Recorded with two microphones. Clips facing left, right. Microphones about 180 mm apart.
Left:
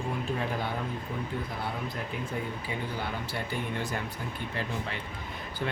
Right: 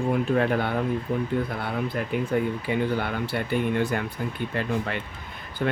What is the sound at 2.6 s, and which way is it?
Speech, 65° right (ahead or behind).